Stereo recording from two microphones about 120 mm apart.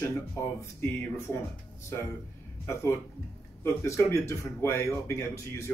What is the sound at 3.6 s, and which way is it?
Speech, 20° left (ahead or behind).